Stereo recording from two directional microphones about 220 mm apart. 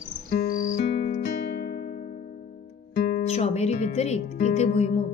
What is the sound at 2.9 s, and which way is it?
Guitar, 45° left (ahead or behind).